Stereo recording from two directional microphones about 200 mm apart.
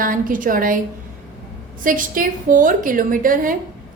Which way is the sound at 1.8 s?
45° right (ahead or behind).